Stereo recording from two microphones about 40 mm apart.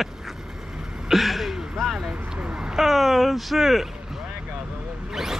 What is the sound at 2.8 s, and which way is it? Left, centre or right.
Speech, centre.